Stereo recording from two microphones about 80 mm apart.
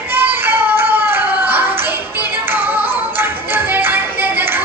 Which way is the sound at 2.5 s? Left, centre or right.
Right.